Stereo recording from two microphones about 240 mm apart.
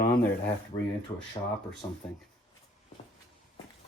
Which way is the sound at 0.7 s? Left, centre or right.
Left.